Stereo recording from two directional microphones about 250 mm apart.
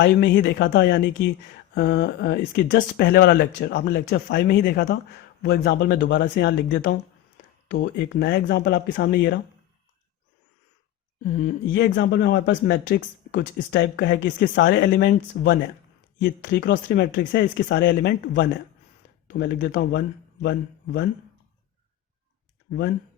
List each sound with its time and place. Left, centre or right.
0.0 s speech: left
11.3 s speech: left
11.7 s speech: left